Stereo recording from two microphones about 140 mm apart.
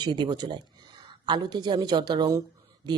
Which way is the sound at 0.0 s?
30° right (ahead or behind).